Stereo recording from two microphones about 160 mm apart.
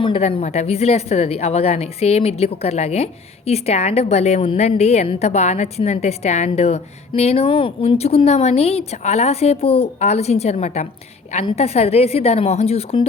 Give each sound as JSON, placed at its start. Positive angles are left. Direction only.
{"t": 0.0, "sound": "a woman's voice", "side_deg": 35}